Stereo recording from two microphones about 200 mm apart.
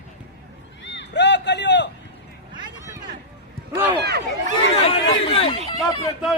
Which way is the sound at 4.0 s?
55° right (ahead or behind).